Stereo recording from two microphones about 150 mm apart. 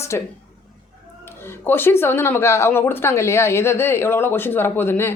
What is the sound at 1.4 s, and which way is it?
A woman's voice, 15° left (ahead or behind).